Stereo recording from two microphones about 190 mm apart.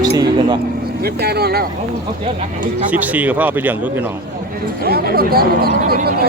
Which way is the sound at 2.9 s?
10° right (ahead or behind).